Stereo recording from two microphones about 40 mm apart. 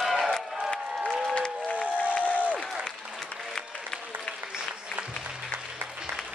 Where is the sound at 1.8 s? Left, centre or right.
Left.